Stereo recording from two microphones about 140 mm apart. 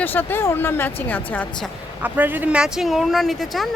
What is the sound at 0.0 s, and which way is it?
Speech, 15° left (ahead or behind).